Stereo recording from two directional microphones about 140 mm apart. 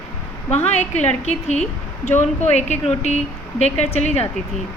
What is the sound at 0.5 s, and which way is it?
A woman's voice, 50° left (ahead or behind).